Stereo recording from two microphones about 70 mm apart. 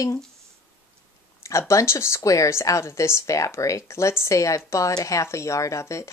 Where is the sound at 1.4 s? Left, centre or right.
Left.